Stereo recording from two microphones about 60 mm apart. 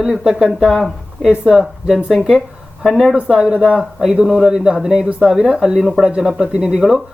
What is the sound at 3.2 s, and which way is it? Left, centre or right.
Speech, centre.